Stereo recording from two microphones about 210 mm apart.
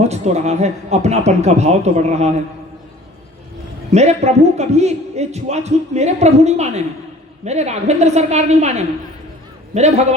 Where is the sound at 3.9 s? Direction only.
30° right (ahead or behind).